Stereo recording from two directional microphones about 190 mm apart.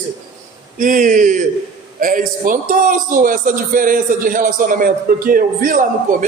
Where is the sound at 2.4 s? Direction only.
45° right (ahead or behind).